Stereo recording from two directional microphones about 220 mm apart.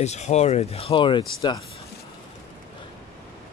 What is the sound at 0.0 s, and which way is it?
Speech, 30° left (ahead or behind).